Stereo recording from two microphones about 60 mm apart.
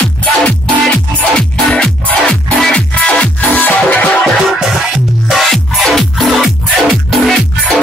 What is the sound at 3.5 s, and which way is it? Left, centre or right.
Music, left.